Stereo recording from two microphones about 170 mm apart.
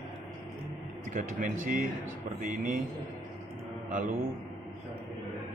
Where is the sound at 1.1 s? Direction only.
50° right (ahead or behind).